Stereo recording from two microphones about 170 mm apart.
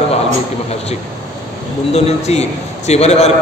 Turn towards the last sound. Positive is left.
turn(degrees=40)  # may be behind; listen again after turning